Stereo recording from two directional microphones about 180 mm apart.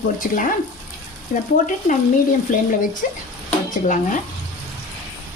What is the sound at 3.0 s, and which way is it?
Speech, 50° left (ahead or behind).